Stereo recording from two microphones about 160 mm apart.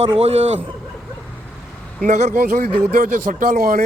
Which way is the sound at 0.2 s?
40° right (ahead or behind).